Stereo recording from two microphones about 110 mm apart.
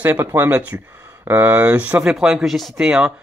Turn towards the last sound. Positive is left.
turn(degrees=-10)  # may be behind; listen again after turning